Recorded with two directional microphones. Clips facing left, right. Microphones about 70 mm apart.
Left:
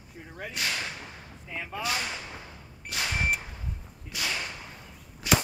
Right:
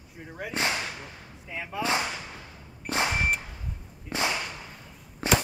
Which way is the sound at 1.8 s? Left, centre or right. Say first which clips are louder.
Right 5 dB; right.